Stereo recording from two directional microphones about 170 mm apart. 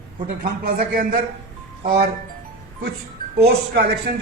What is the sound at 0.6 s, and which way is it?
Speech, 55° right (ahead or behind).